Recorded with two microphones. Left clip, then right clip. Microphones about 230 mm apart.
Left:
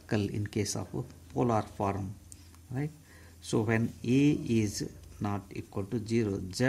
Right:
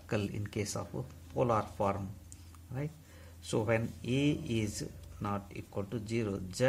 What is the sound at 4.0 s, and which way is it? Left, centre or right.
Speech, left.